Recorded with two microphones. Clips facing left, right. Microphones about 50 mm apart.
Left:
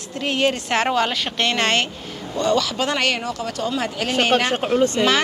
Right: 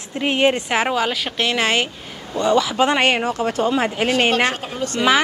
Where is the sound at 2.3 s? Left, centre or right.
Centre.